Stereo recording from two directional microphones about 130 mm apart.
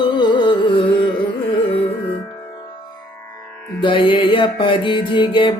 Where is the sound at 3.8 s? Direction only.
40° left (ahead or behind).